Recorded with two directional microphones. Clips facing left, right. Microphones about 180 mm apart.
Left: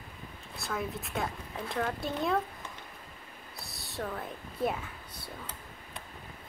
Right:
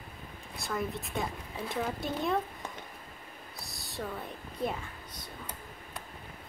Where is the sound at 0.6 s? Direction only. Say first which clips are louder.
Right 1 dB; centre (ahead or behind).